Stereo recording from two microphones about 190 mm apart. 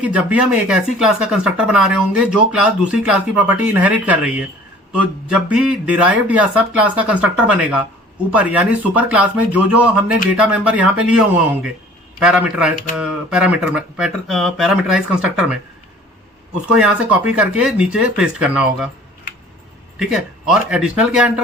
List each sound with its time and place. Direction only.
0.0 s speech: 5° right (ahead or behind)
12.2 s speech: 5° right (ahead or behind)
16.7 s speech: 5° right (ahead or behind)
20.0 s speech: 5° right (ahead or behind)